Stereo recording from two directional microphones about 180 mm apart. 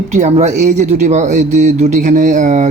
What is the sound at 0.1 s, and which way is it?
Speech, 40° right (ahead or behind).